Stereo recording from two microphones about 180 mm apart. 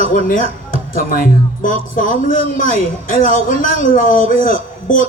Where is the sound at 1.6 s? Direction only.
50° left (ahead or behind).